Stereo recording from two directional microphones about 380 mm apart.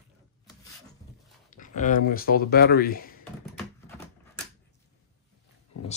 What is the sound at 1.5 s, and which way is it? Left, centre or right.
Speech, centre.